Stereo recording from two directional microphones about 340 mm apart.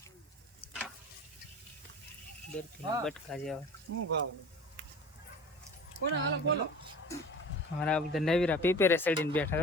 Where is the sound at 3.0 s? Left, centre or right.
Centre.